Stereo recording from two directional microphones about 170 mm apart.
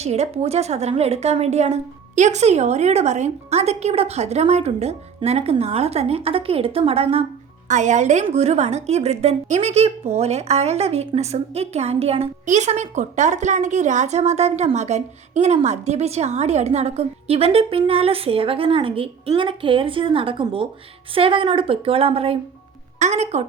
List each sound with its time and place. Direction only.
0.0 s a woman's voice: 40° right (ahead or behind)